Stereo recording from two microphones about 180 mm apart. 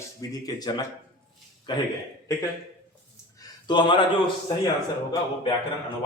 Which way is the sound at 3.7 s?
25° left (ahead or behind).